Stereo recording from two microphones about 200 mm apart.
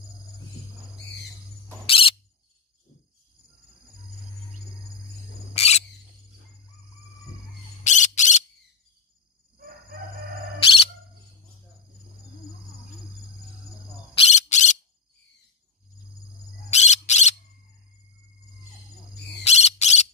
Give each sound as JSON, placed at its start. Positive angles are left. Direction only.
{"t": 1.9, "sound": "cricket", "side_deg": 25}
{"t": 5.5, "sound": "cricket", "side_deg": 30}
{"t": 7.8, "sound": "squawk", "side_deg": 35}
{"t": 14.1, "sound": "bird", "side_deg": 35}
{"t": 16.7, "sound": "bird", "side_deg": 35}
{"t": 19.4, "sound": "bird", "side_deg": 35}